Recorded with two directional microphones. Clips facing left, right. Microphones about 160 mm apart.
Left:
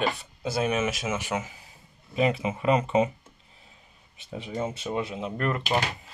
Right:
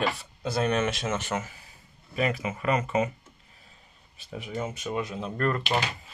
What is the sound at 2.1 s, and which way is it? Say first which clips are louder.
Speech: left 3 dB; 25° left (ahead or behind).